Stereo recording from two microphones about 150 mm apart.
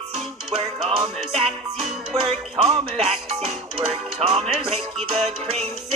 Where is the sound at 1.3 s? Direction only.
40° right (ahead or behind).